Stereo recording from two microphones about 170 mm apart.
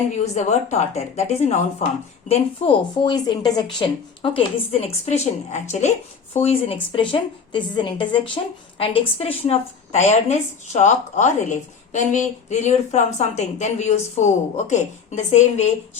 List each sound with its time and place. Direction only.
0.3 s a woman's voice: 40° left (ahead or behind)